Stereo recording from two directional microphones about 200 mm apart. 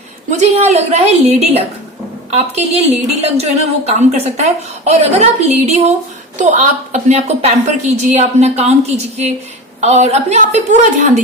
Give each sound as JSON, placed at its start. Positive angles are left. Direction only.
{"t": 0.3, "sound": "a woman's voice", "side_deg": -35}